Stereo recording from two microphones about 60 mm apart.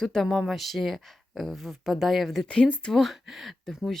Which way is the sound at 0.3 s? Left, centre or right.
Centre.